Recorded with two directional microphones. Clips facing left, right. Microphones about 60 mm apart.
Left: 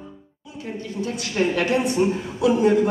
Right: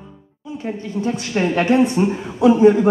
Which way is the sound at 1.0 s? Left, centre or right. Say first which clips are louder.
Right 3 dB; right.